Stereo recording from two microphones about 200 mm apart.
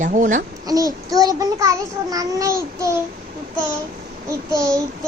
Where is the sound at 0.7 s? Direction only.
20° right (ahead or behind).